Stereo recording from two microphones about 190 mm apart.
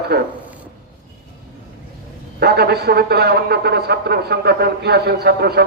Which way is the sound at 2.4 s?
55° right (ahead or behind).